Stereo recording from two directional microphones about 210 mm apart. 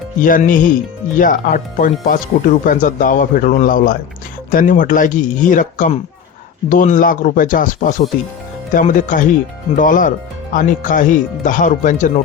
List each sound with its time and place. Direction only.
0.2 s speech: 40° left (ahead or behind)